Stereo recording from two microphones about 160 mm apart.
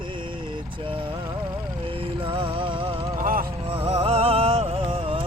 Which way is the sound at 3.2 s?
60° right (ahead or behind).